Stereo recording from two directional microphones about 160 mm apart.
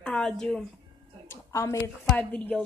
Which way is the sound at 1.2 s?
20° left (ahead or behind).